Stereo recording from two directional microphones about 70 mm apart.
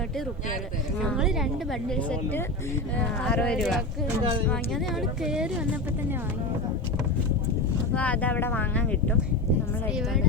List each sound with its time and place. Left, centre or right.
1.1 s a woman's voice: centre
3.0 s speech: centre
3.4 s speech: centre
5.2 s a woman's voice: centre
7.9 s speech: left